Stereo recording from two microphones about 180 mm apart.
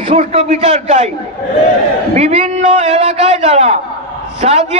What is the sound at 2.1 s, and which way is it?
A man's voice, 40° right (ahead or behind).